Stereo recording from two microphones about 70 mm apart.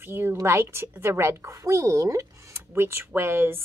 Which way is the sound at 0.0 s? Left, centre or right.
Right.